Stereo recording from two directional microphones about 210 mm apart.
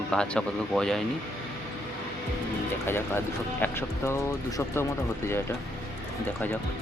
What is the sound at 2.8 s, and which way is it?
Speech, 10° left (ahead or behind).